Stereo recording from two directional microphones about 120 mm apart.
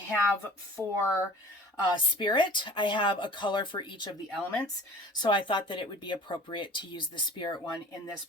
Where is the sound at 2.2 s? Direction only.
40° left (ahead or behind).